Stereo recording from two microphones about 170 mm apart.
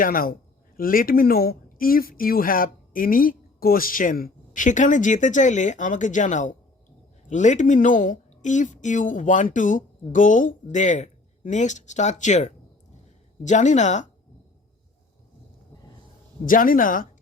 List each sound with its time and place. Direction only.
0.0 s a woman's voice: 55° left (ahead or behind)
16.5 s a woman's voice: 55° left (ahead or behind)